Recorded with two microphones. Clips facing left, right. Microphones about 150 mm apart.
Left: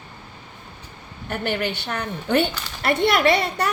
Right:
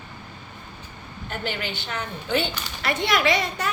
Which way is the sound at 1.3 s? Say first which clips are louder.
Left 6 dB; 60° left (ahead or behind).